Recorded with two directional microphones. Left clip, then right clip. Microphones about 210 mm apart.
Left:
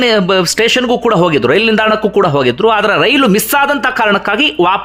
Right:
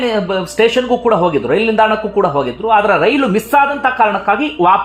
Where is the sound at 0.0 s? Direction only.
25° left (ahead or behind).